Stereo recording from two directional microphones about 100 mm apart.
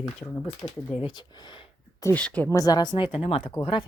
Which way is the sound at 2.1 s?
15° left (ahead or behind).